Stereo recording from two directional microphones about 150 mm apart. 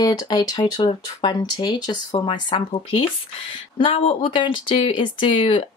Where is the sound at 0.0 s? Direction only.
30° left (ahead or behind).